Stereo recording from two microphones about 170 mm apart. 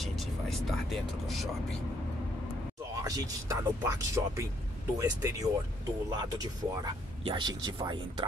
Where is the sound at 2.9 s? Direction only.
20° right (ahead or behind).